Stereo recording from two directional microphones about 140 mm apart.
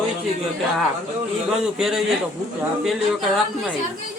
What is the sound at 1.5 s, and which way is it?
Speech, centre (ahead or behind).